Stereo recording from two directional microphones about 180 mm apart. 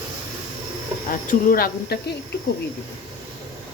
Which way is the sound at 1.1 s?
50° left (ahead or behind).